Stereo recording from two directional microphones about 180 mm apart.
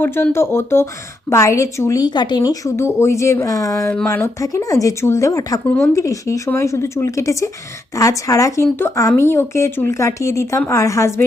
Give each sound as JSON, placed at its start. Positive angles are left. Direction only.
{"t": 0.0, "sound": "speech", "side_deg": 10}